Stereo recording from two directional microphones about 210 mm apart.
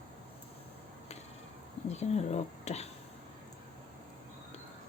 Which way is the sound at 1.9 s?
30° left (ahead or behind).